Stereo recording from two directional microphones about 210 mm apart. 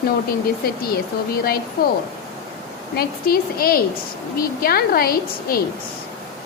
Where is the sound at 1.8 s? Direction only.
45° left (ahead or behind).